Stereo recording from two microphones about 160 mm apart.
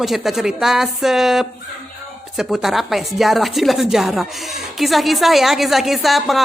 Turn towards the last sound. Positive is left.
turn(degrees=0)  # may be behind; listen again after turning